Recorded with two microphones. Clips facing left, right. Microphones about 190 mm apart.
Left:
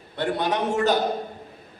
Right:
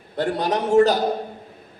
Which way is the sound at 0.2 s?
40° right (ahead or behind).